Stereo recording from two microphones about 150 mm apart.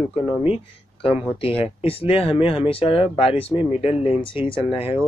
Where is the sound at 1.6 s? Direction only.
40° left (ahead or behind).